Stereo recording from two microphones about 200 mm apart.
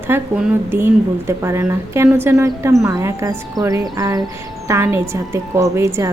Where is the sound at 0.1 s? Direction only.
10° right (ahead or behind).